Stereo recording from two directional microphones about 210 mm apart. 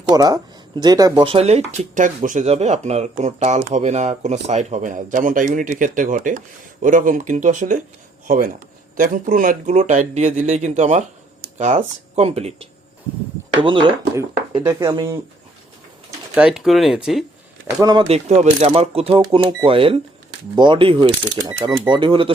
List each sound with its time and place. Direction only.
0.1 s speech: 20° right (ahead or behind); by 7.8 s 35° right (ahead or behind)
9.0 s speech: 40° right (ahead or behind); by 15.2 s 15° right (ahead or behind)
16.3 s speech: 5° right (ahead or behind)
17.7 s speech: 15° right (ahead or behind)
18.1 s speech: 30° right (ahead or behind)